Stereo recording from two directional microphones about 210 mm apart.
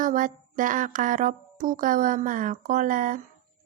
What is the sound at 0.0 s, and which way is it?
Speech, 40° right (ahead or behind).